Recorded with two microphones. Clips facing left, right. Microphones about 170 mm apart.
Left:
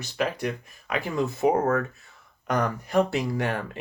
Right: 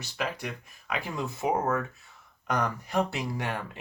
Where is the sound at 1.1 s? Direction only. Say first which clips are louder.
Left 7 dB; 35° left (ahead or behind).